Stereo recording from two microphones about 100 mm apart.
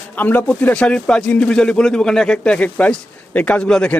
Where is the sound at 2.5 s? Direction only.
15° left (ahead or behind).